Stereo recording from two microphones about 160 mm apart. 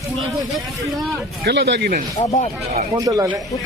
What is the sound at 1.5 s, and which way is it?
Speech, 90° right.